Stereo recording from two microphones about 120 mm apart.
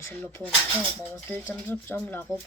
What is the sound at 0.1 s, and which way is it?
A woman's voice, 15° left (ahead or behind).